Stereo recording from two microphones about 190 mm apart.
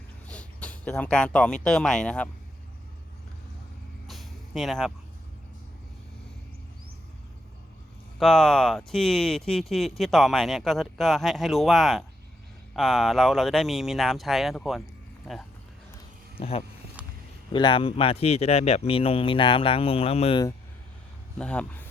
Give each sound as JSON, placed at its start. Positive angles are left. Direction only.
{"t": 0.3, "sound": "speech", "side_deg": 5}
{"t": 4.0, "sound": "vehicle", "side_deg": 0}
{"t": 8.2, "sound": "speech", "side_deg": 0}
{"t": 16.4, "sound": "speech", "side_deg": 30}
{"t": 17.0, "sound": "a sound", "side_deg": -5}
{"t": 17.5, "sound": "speech", "side_deg": 25}
{"t": 21.3, "sound": "speech", "side_deg": 5}